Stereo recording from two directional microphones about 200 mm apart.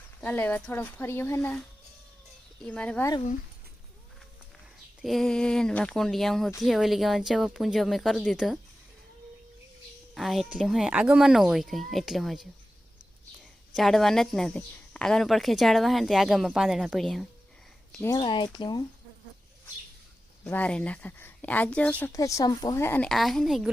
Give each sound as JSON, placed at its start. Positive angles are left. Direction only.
{"t": 0.2, "sound": "a woman's voice", "side_deg": 10}
{"t": 5.0, "sound": "speech", "side_deg": 0}
{"t": 10.2, "sound": "speech", "side_deg": 0}
{"t": 13.7, "sound": "speech", "side_deg": 0}
{"t": 17.9, "sound": "speech", "side_deg": 10}
{"t": 18.2, "sound": "speech", "side_deg": 25}
{"t": 20.4, "sound": "a woman's voice", "side_deg": 10}